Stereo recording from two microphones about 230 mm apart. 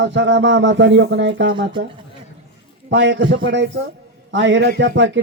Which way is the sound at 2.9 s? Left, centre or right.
Right.